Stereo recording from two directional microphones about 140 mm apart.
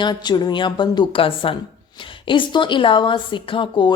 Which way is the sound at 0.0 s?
30° left (ahead or behind).